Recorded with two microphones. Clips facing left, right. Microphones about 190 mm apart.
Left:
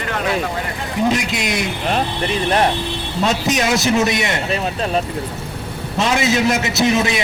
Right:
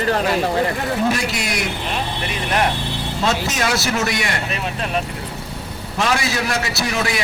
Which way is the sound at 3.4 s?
20° left (ahead or behind).